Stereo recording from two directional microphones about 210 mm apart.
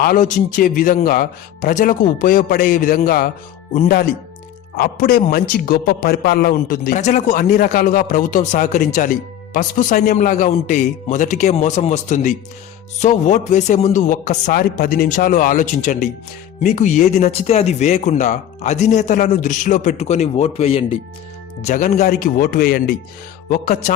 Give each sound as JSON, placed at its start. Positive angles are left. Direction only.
{"t": 0.0, "sound": "a man's voice", "side_deg": 40}
{"t": 21.6, "sound": "a man's voice", "side_deg": 40}